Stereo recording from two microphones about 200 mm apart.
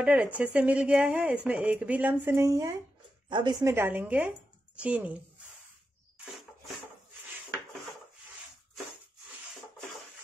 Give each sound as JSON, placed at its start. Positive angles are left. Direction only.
{"t": 0.0, "sound": "speech", "side_deg": -5}
{"t": 3.7, "sound": "speech", "side_deg": -10}